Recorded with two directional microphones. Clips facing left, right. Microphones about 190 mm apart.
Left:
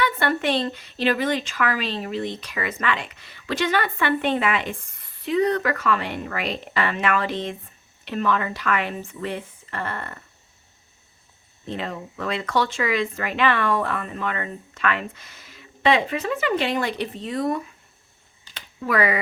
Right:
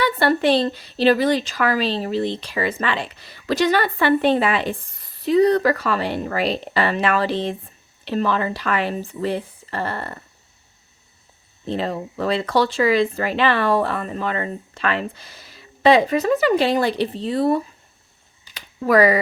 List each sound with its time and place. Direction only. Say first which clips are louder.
0.0 s a woman's voice: right 5 dB; 35° right (ahead or behind)
11.6 s a woman's voice: right 6 dB; 35° right (ahead or behind)
18.8 s a woman's voice: right 7 dB; 40° right (ahead or behind)